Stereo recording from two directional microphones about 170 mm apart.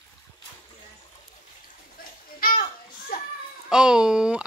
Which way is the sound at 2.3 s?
60° left (ahead or behind).